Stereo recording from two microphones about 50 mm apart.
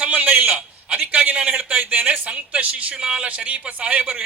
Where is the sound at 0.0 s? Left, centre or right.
Right.